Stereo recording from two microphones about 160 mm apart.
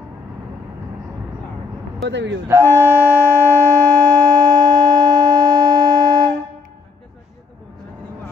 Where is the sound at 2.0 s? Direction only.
90° right.